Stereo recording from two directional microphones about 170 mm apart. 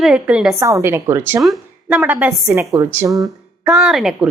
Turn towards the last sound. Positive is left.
turn(degrees=0)  # may be behind; listen again after turning